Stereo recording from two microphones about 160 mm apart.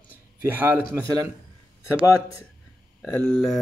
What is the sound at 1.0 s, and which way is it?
Speech, 20° right (ahead or behind).